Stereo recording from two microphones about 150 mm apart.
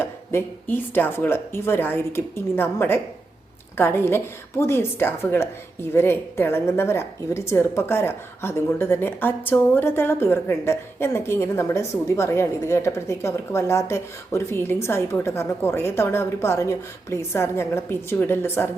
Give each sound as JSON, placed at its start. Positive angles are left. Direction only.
{"t": 0.0, "sound": "a woman's voice", "side_deg": 15}